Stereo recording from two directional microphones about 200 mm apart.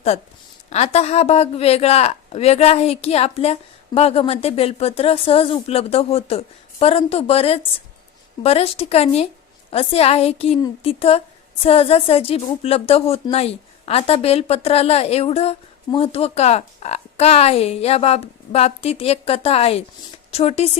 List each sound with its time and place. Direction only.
0.7 s a woman's voice: 30° left (ahead or behind)